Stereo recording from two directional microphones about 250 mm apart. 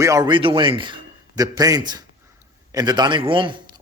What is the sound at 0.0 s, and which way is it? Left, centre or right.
Speech, centre.